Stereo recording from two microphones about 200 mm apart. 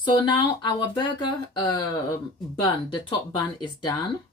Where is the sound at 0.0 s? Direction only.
20° left (ahead or behind).